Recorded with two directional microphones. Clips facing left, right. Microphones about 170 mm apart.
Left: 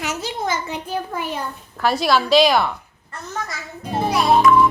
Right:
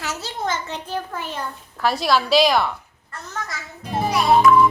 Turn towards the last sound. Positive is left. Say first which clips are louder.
# even
turn(degrees=0)  # may be behind; listen again after turning